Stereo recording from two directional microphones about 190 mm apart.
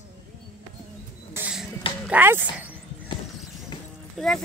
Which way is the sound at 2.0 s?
10° right (ahead or behind).